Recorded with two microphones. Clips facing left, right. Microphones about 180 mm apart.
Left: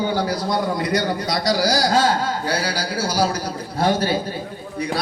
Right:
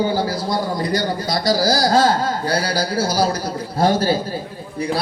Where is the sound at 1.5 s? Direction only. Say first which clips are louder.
Right 3 dB; 35° right (ahead or behind).